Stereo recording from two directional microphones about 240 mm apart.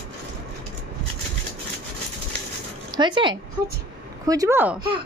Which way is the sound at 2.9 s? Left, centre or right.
Centre.